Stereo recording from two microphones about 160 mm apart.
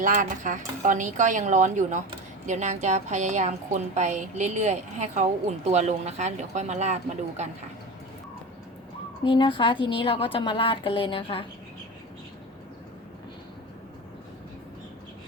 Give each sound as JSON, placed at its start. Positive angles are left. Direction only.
{"t": 0.0, "sound": "a woman's voice", "side_deg": -55}
{"t": 9.2, "sound": "a woman's voice", "side_deg": 30}